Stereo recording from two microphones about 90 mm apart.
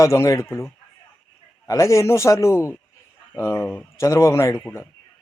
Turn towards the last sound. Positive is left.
turn(degrees=35)  # may be behind; listen again after turning